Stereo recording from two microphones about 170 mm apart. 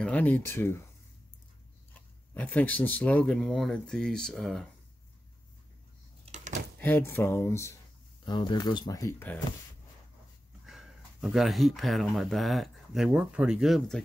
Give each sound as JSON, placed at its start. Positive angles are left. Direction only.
{"t": 0.0, "sound": "speech", "side_deg": 10}
{"t": 2.0, "sound": "speech", "side_deg": 10}
{"t": 6.2, "sound": "a sound", "side_deg": -45}
{"t": 6.8, "sound": "speech", "side_deg": 10}
{"t": 8.3, "sound": "speech", "side_deg": 25}
{"t": 10.6, "sound": "speech", "side_deg": -5}